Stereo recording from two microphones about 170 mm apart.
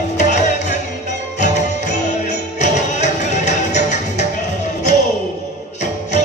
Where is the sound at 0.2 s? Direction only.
45° left (ahead or behind).